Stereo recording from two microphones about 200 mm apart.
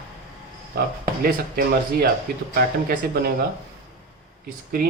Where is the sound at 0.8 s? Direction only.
50° right (ahead or behind).